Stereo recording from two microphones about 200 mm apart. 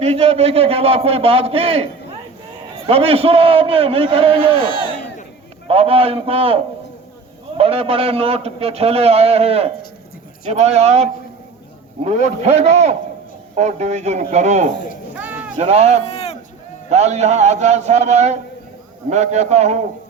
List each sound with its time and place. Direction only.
0.0 s a man's voice: 30° right (ahead or behind)
5.6 s a man's voice: 30° right (ahead or behind)
7.6 s a man's voice: 30° right (ahead or behind)
15.1 s a sound: 5° right (ahead or behind)
15.5 s a man's voice: 30° right (ahead or behind)
16.0 s a sound: 30° left (ahead or behind)
16.9 s a man's voice: 35° right (ahead or behind)